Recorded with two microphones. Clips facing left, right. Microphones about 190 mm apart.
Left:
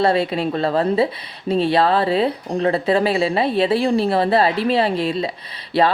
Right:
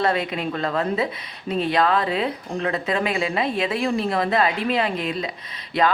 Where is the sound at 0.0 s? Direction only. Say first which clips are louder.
Left 5 dB; 30° left (ahead or behind).